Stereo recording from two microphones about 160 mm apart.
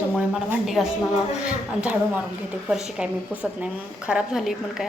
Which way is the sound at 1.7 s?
5° right (ahead or behind).